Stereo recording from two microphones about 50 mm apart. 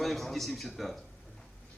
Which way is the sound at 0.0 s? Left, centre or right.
Centre.